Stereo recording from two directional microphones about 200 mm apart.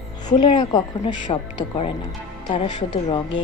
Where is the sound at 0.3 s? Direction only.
20° left (ahead or behind).